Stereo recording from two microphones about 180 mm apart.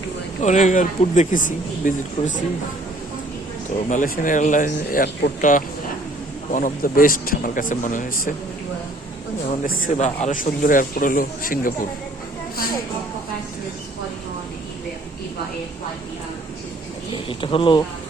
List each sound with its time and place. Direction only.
0.4 s speech: 45° left (ahead or behind)
3.8 s speech: 50° left (ahead or behind)
9.8 s speech: 40° left (ahead or behind)
17.1 s speech: 30° left (ahead or behind)